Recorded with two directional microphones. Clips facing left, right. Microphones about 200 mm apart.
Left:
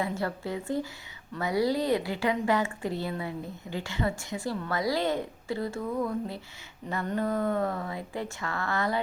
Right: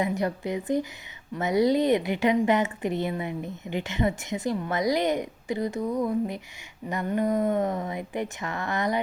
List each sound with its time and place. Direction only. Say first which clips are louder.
0.0 s a woman's voice: right 4 dB; 15° right (ahead or behind)